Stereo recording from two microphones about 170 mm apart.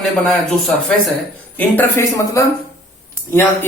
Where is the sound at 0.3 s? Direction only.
5° left (ahead or behind).